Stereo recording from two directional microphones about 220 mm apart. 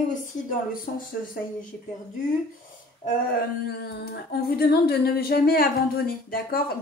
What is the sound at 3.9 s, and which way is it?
Speech, 45° left (ahead or behind).